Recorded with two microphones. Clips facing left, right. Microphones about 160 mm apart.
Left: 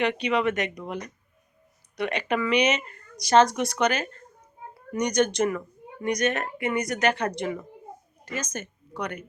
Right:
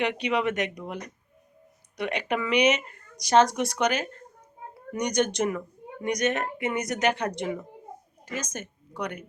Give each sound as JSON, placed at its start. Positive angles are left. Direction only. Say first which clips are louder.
{"t": 0.0, "sound": "a woman's voice", "louder": "left 2 dB", "side_deg": -15}
{"t": 2.0, "sound": "a woman's voice", "louder": "left 2 dB", "side_deg": -15}